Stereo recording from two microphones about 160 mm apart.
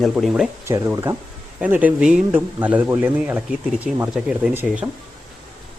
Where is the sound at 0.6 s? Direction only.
20° right (ahead or behind).